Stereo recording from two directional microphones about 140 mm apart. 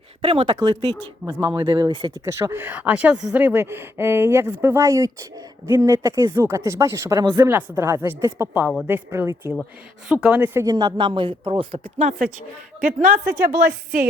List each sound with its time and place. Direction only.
0.2 s speech: 40° right (ahead or behind)
2.2 s speech: 20° right (ahead or behind)
10.7 s speech: 30° right (ahead or behind)
12.8 s speech: 75° right (ahead or behind)